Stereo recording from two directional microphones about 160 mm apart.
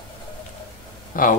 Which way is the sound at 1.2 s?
60° left (ahead or behind).